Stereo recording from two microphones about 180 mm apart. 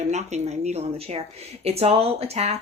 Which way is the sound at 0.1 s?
40° right (ahead or behind).